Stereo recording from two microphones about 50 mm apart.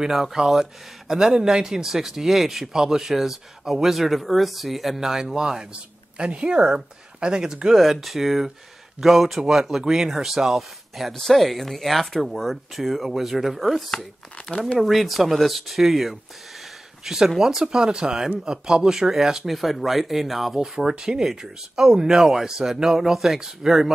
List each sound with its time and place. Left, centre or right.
0.0 s speech: centre
7.7 s speech: centre